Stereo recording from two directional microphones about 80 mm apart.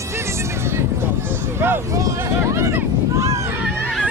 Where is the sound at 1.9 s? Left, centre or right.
Right.